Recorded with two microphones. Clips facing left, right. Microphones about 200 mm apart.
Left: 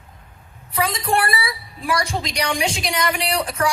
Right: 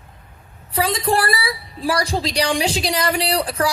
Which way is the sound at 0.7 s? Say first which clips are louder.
Right 2 dB; 30° right (ahead or behind).